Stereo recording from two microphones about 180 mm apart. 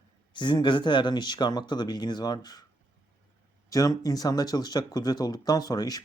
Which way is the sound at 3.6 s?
20° left (ahead or behind).